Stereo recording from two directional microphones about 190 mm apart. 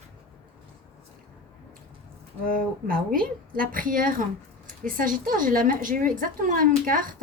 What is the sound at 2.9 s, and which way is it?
Speech, 50° right (ahead or behind).